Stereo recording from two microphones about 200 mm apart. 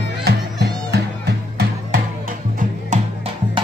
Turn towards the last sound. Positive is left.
turn(degrees=-30)  # may be behind; listen again after turning